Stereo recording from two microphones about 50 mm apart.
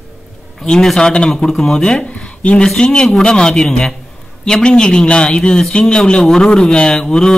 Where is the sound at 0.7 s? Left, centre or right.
Centre.